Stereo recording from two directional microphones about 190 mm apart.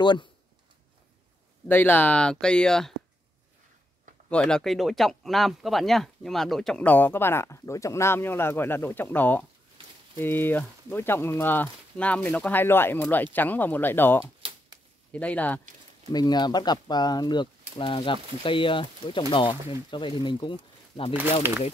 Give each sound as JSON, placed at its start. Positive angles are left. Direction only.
{"t": 0.0, "sound": "speech", "side_deg": 25}
{"t": 1.7, "sound": "speech", "side_deg": 10}
{"t": 4.3, "sound": "speech", "side_deg": 5}
{"t": 14.2, "sound": "a sound", "side_deg": -25}
{"t": 15.1, "sound": "speech", "side_deg": 5}
{"t": 16.1, "sound": "speech", "side_deg": 20}
{"t": 21.4, "sound": "speech", "side_deg": -10}